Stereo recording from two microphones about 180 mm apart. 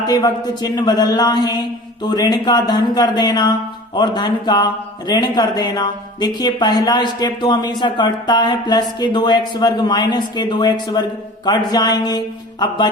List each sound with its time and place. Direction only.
0.0 s speech: 20° left (ahead or behind)